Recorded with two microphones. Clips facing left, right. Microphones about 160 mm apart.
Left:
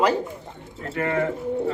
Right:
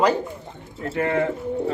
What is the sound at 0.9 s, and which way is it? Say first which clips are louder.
Speech: right 2 dB; 25° right (ahead or behind).